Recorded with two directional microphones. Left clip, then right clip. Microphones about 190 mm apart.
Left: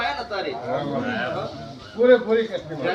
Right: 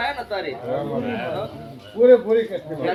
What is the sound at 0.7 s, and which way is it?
A man's voice, 35° right (ahead or behind).